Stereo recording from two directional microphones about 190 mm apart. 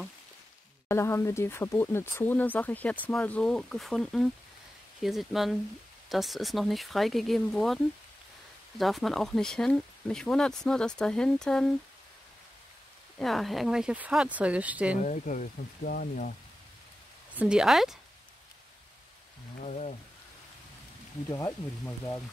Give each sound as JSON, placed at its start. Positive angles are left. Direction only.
{"t": 0.8, "sound": "speech", "side_deg": 15}
{"t": 13.2, "sound": "speech", "side_deg": 0}
{"t": 15.0, "sound": "speech", "side_deg": 40}
{"t": 17.4, "sound": "speech", "side_deg": -5}
{"t": 19.6, "sound": "a sound", "side_deg": 35}
{"t": 21.3, "sound": "speech", "side_deg": 15}